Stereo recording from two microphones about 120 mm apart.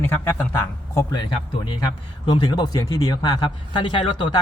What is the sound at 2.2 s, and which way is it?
A man's voice, 40° left (ahead or behind).